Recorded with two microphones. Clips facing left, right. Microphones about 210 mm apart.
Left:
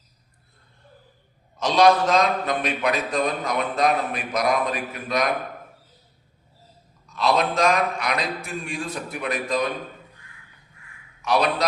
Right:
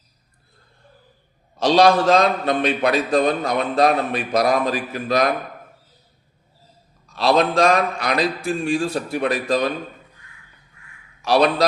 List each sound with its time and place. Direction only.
1.5 s a man's voice: 30° right (ahead or behind)
7.1 s a man's voice: 30° right (ahead or behind)
11.2 s a man's voice: 35° right (ahead or behind)